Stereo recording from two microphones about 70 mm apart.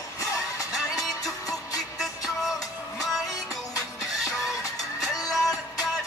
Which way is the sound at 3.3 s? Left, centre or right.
Left.